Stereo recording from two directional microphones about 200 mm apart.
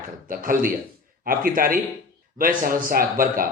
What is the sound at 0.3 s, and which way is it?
Speech, 45° right (ahead or behind).